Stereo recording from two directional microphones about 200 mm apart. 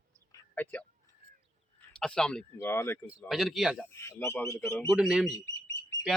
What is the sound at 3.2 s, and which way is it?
Speech, centre (ahead or behind).